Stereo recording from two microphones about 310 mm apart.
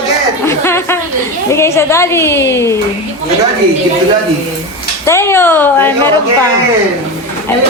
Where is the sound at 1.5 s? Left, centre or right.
Centre.